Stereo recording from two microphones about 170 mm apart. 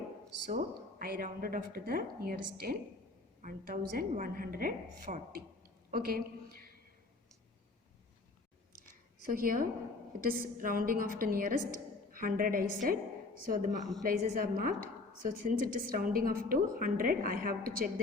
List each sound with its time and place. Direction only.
0.4 s a woman's voice: 50° right (ahead or behind)
9.3 s a woman's voice: 55° right (ahead or behind)